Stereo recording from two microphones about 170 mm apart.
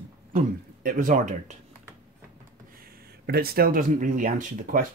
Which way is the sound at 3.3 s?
65° right (ahead or behind).